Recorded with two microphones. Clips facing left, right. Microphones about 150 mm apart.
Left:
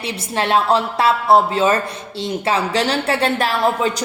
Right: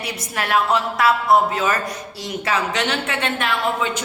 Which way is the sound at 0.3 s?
30° left (ahead or behind).